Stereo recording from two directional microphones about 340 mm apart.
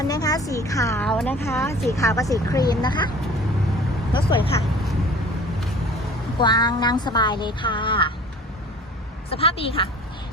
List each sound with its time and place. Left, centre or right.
0.0 s a woman's voice: centre
4.1 s a woman's voice: centre
6.4 s a woman's voice: centre
9.3 s a woman's voice: centre